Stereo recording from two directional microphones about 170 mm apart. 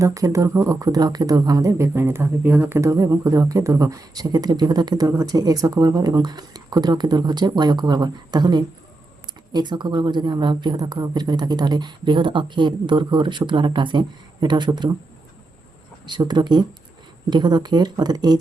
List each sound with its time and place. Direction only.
0.0 s speech: 20° right (ahead or behind)
16.0 s speech: 25° right (ahead or behind)